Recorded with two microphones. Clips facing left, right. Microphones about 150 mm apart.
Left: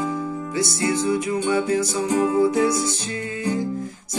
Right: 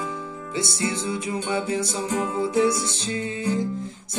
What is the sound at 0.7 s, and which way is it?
Speech, 25° right (ahead or behind).